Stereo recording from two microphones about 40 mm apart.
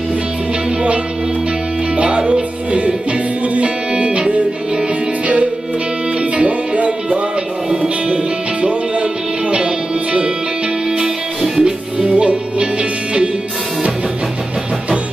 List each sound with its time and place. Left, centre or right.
2.0 s music: right
6.3 s music: right
7.7 s music: right
11.0 s music: centre